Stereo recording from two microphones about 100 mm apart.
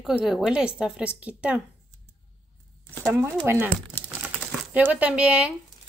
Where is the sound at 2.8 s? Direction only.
20° left (ahead or behind).